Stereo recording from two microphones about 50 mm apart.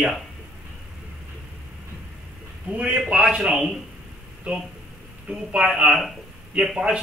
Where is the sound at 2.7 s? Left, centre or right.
Right.